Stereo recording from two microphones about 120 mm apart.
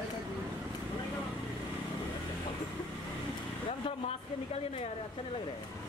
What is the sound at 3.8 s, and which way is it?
A woman's voice, 55° left (ahead or behind).